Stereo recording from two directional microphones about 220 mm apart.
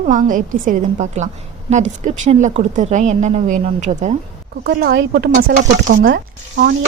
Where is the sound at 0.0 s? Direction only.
35° right (ahead or behind).